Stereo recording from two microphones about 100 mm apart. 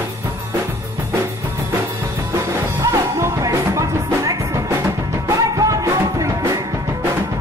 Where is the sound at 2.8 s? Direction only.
35° right (ahead or behind).